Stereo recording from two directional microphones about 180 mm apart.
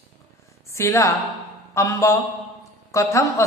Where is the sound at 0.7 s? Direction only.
15° left (ahead or behind).